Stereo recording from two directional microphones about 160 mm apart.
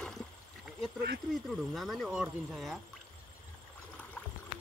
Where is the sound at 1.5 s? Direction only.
Centre (ahead or behind).